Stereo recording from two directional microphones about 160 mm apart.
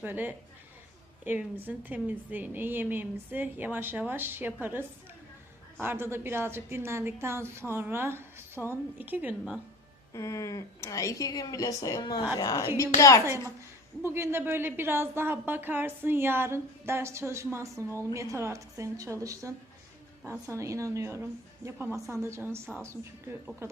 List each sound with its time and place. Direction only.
0.0 s a woman's voice: 10° right (ahead or behind)
10.1 s speech: 20° left (ahead or behind)
14.0 s a woman's voice: 15° right (ahead or behind)